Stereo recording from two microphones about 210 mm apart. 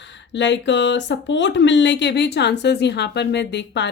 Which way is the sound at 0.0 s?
55° left (ahead or behind).